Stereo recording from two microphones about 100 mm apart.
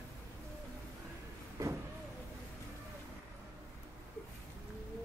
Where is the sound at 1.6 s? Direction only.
35° right (ahead or behind).